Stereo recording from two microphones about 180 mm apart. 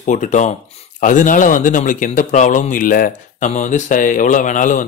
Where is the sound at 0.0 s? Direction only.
45° left (ahead or behind).